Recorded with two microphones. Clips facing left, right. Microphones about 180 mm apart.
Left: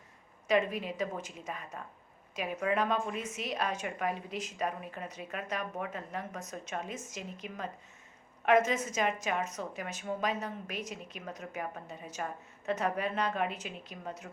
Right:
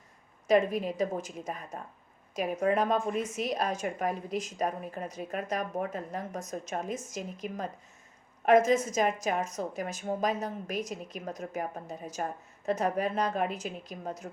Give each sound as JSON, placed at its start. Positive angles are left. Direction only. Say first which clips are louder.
{"t": 0.4, "sound": "a woman's voice", "louder": "right 4 dB", "side_deg": -40}